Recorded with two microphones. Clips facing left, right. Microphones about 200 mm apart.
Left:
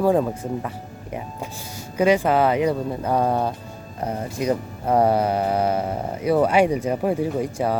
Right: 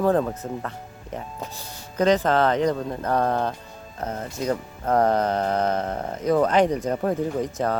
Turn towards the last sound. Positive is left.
turn(degrees=10)  # may be behind; listen again after turning